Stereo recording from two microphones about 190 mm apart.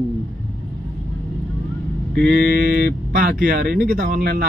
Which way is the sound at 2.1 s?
60° right (ahead or behind).